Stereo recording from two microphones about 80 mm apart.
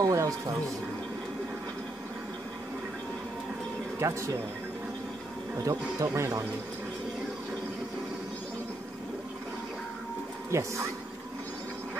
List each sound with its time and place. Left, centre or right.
0.0 s speech: right
4.0 s speech: right
5.6 s speech: right
10.5 s speech: right